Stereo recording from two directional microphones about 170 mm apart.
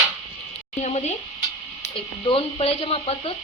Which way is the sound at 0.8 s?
40° left (ahead or behind).